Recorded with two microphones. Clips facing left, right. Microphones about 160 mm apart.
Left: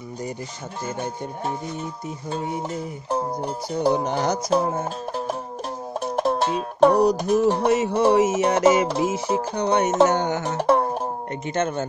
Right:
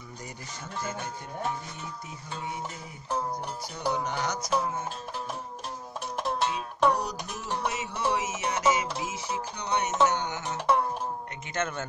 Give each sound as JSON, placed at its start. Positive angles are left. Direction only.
{"t": 3.1, "sound": "speech", "side_deg": 35}
{"t": 5.1, "sound": "music", "side_deg": 35}
{"t": 6.3, "sound": "music", "side_deg": 60}
{"t": 7.1, "sound": "music", "side_deg": 40}
{"t": 11.5, "sound": "speech", "side_deg": 25}